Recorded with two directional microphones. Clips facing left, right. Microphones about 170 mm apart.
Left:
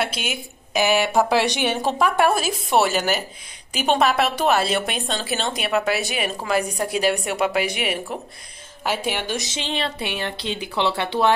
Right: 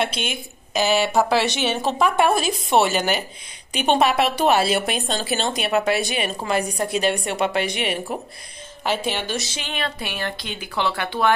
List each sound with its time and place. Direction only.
0.0 s a woman's voice: 5° left (ahead or behind); by 11.3 s 25° left (ahead or behind)